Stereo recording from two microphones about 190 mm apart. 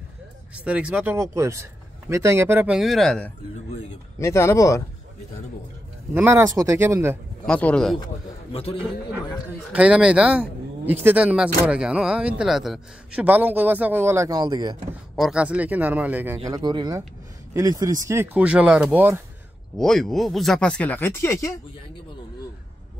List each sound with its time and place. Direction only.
0.7 s speech: 5° right (ahead or behind)
4.2 s speech: 15° left (ahead or behind)
6.1 s speech: 10° right (ahead or behind)
7.4 s speech: 5° left (ahead or behind)
9.7 s speech: 5° right (ahead or behind)
15.1 s speech: 5° right (ahead or behind)
16.4 s speech: 20° right (ahead or behind)
19.8 s speech: centre (ahead or behind)